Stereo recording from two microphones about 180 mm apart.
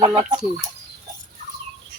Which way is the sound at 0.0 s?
35° right (ahead or behind).